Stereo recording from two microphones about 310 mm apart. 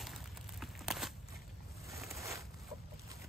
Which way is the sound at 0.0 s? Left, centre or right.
Centre.